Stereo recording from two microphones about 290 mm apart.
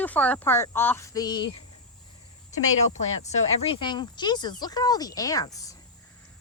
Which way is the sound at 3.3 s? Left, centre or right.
Left.